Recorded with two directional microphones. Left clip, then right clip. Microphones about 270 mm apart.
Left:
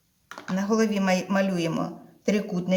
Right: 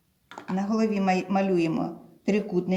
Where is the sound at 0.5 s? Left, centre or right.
Left.